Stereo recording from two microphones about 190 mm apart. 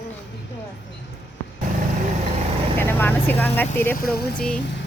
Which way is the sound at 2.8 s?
10° left (ahead or behind).